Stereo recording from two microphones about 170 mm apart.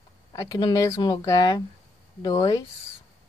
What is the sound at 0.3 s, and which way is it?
Speech, 20° left (ahead or behind).